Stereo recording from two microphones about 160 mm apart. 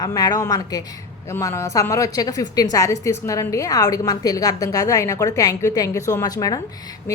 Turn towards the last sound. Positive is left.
turn(degrees=25)  # may be behind; listen again after turning